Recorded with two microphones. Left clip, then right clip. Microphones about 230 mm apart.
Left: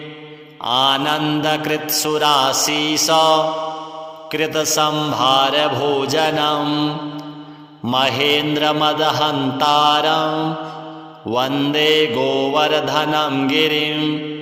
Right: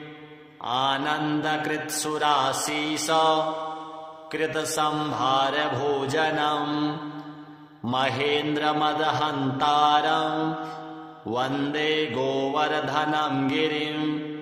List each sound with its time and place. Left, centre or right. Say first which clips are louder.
0.6 s mantra: left 9 dB; left